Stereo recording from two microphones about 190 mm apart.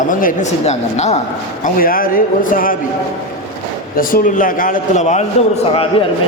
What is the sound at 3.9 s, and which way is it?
A man's voice, 45° left (ahead or behind).